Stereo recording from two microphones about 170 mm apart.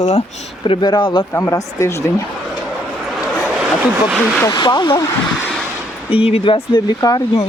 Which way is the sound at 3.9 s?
10° right (ahead or behind).